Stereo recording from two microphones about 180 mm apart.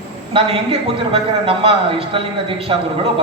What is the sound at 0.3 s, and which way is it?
A man's voice, 30° right (ahead or behind).